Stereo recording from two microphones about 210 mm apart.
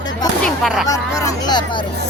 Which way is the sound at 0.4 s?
Centre (ahead or behind).